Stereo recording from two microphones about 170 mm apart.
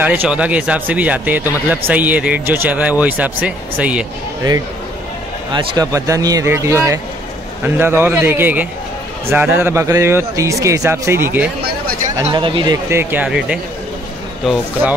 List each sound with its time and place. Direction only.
0.0 s speech: 10° right (ahead or behind)
5.5 s speech: 25° right (ahead or behind)
12.3 s speech: 30° right (ahead or behind)
12.9 s speech: 10° right (ahead or behind)